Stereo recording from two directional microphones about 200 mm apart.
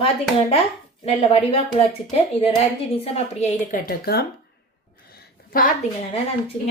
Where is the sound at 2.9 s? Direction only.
35° left (ahead or behind); by 4.2 s 50° left (ahead or behind).